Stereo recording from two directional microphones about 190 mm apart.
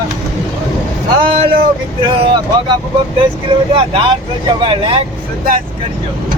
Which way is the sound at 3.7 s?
25° right (ahead or behind).